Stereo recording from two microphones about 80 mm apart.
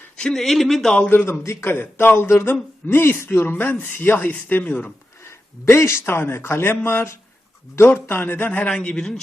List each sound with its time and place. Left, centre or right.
0.2 s speech: centre
1.1 s speech: left
5.2 s a man's voice: left; by 9.2 s centre